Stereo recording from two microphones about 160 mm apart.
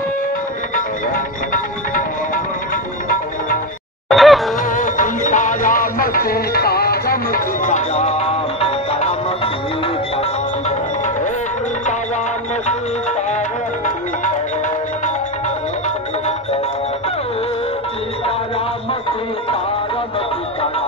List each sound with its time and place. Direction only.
0.7 s music: 60° left (ahead or behind)
4.1 s honk: centre (ahead or behind)
4.6 s music: 55° left (ahead or behind); by 9.5 s 40° left (ahead or behind)